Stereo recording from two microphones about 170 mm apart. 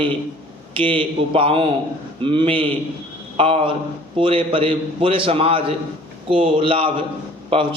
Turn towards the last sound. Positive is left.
turn(degrees=-30)  # may be behind; listen again after turning